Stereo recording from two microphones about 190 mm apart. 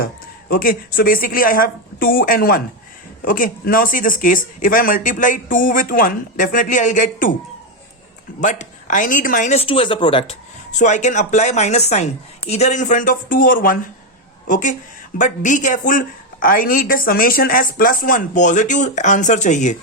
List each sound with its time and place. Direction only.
0.0 s a woman's voice: 50° left (ahead or behind)
8.4 s speech: 40° left (ahead or behind)
10.7 s a woman's voice: 40° left (ahead or behind)